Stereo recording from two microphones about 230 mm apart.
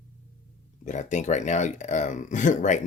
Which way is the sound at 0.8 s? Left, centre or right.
Left.